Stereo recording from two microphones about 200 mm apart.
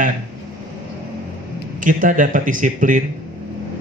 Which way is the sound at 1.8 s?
40° right (ahead or behind).